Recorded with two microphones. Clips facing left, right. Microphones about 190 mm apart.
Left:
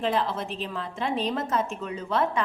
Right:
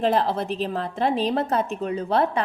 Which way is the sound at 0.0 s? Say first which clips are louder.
Right 5 dB; 40° right (ahead or behind).